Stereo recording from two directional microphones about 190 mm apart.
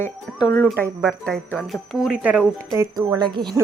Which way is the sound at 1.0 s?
5° left (ahead or behind).